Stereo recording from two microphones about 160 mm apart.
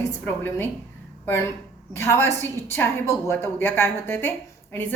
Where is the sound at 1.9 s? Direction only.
15° left (ahead or behind).